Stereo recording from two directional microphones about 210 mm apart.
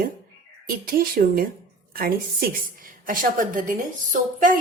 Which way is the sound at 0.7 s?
45° right (ahead or behind).